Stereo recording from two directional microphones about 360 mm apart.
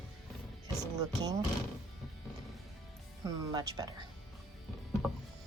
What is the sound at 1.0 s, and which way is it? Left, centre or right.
Speech, centre.